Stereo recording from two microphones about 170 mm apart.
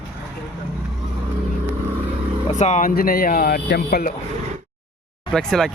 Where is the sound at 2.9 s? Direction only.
60° left (ahead or behind).